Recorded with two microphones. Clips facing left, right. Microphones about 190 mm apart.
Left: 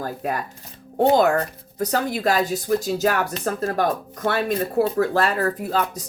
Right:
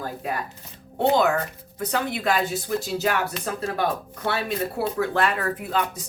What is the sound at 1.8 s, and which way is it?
A woman's voice, 40° left (ahead or behind).